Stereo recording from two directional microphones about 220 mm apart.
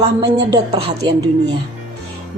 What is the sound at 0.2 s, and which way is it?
A woman's voice, 20° right (ahead or behind).